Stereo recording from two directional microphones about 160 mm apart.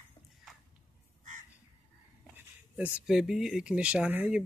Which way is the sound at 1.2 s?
50° right (ahead or behind).